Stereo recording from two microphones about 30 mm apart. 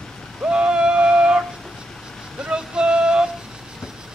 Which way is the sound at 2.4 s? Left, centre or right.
Right.